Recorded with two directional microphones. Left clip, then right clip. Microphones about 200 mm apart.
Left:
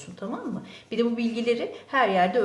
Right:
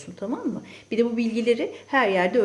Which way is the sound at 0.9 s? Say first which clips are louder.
Right 3 dB; 25° right (ahead or behind).